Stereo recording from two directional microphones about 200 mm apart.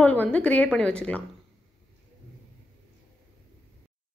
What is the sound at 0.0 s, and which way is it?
A woman's voice, 10° left (ahead or behind).